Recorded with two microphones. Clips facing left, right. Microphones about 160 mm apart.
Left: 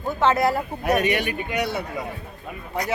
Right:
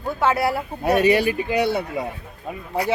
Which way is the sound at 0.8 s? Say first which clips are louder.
Right 5 dB; 30° right (ahead or behind).